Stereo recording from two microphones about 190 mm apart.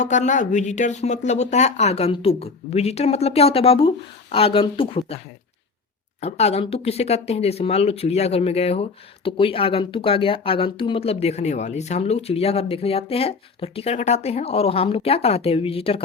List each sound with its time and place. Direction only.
0.0 s speech: 40° left (ahead or behind)